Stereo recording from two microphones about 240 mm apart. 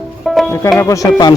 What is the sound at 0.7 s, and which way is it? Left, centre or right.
Speech, centre.